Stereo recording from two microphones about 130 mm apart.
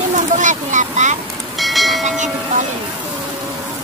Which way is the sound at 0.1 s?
70° right (ahead or behind).